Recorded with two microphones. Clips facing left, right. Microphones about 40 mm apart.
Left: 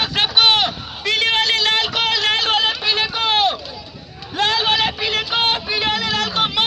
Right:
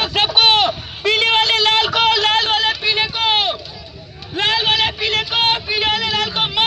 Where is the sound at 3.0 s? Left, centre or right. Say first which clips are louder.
Left 2 dB; centre.